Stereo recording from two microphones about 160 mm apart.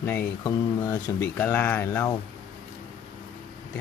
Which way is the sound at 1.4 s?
10° left (ahead or behind).